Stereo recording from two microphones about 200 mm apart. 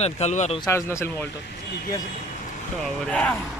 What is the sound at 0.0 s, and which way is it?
Speech, 35° left (ahead or behind).